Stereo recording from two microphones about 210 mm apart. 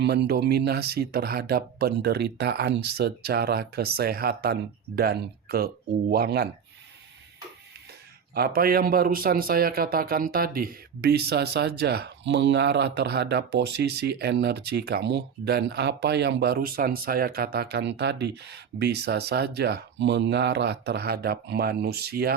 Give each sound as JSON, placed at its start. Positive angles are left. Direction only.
{"t": 0.0, "sound": "speech", "side_deg": -50}
{"t": 8.4, "sound": "speech", "side_deg": -45}